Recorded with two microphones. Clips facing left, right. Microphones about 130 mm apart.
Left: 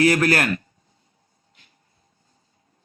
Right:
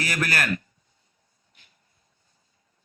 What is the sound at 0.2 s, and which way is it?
Speech, 30° left (ahead or behind).